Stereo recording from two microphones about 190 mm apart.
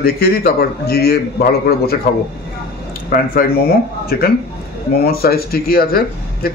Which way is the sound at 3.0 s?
50° left (ahead or behind).